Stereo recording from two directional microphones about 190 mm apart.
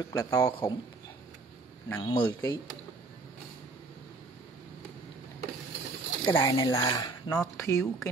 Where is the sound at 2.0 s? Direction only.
25° left (ahead or behind).